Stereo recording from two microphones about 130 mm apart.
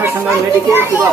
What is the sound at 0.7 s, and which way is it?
Speech, 15° right (ahead or behind).